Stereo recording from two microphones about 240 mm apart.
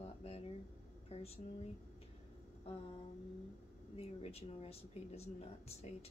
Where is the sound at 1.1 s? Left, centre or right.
Left.